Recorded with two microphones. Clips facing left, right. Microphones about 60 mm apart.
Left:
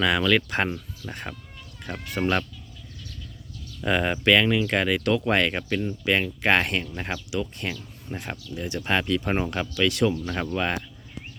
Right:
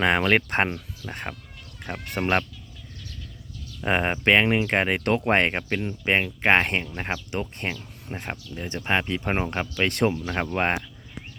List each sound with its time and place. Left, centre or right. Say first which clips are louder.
0.0 s speech: right 1 dB; right
2.0 s speech: left 2 dB; right
3.8 s speech: even; right
7.3 s speech: left 1 dB; right
7.7 s speech: right 1 dB; centre
8.5 s speech: even; right